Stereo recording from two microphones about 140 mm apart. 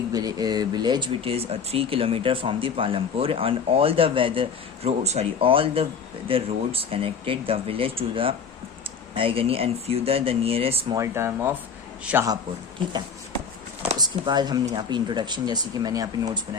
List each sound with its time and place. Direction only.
0.1 s speech: 25° right (ahead or behind); by 10.9 s 45° right (ahead or behind)
10.9 s speech: 20° right (ahead or behind)
14.0 s speech: 30° right (ahead or behind)